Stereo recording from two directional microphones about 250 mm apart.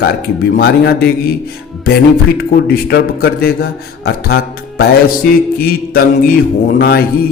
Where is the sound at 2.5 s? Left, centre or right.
Left.